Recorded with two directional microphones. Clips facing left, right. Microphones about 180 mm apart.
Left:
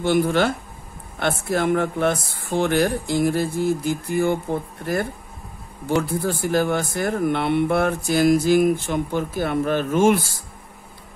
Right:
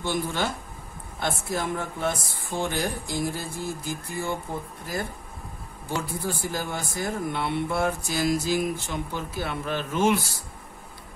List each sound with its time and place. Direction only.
0.0 s speech: 70° left (ahead or behind)
5.9 s speech: 65° left (ahead or behind)